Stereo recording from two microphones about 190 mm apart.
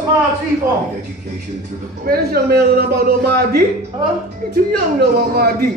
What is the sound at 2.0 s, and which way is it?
A man's voice, 50° right (ahead or behind).